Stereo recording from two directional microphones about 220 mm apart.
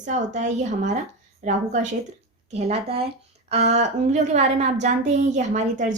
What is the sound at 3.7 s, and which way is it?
A woman's voice, 30° right (ahead or behind).